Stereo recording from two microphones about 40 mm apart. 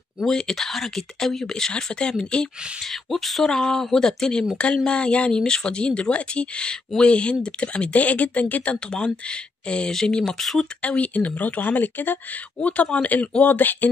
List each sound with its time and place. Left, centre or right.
0.3 s speech: centre
2.8 s speech: centre
3.4 s speech: centre
5.3 s speech: centre; by 8.7 s left
8.7 s speech: left
10.8 s speech: left
12.5 s speech: left
13.4 s speech: left